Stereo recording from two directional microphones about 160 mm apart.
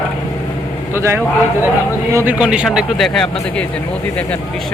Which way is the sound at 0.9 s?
15° right (ahead or behind).